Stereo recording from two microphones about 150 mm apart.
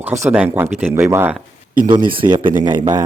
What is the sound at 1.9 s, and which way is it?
Speech, 35° right (ahead or behind).